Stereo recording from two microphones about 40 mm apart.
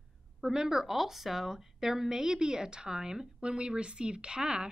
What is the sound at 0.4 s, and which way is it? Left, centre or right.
A woman's voice, centre.